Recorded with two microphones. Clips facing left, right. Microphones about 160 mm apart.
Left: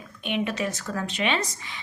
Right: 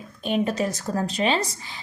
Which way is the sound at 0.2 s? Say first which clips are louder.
Right 4 dB; 40° right (ahead or behind).